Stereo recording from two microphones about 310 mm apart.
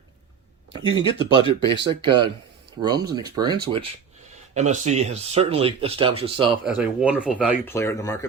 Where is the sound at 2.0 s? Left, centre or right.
Centre.